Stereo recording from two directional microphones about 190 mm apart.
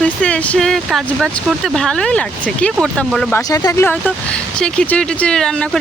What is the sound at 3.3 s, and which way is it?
Speech, 15° left (ahead or behind).